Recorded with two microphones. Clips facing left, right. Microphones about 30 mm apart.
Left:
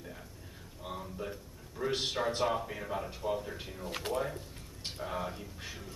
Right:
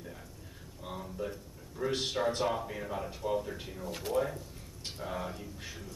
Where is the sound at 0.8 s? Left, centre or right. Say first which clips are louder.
Right 1 dB; centre.